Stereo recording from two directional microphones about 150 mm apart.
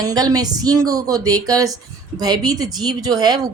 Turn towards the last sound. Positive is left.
turn(degrees=-25)  # may be behind; listen again after turning